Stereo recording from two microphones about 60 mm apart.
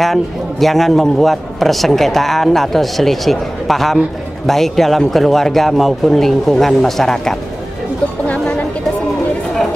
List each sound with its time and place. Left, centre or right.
0.0 s a man's voice: centre